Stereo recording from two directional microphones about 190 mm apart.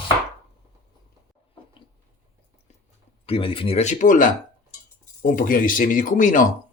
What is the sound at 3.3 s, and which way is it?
Speech, 30° left (ahead or behind).